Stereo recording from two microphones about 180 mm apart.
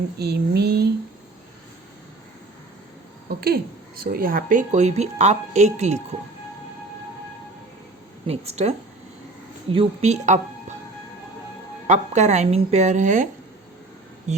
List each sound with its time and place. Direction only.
0.2 s a sound: 60° right (ahead or behind)
3.2 s a sound: 55° right (ahead or behind)
4.0 s speech: 55° right (ahead or behind)
8.3 s speech: 35° right (ahead or behind)
9.7 s speech: 35° right (ahead or behind)
11.9 s speech: 40° right (ahead or behind)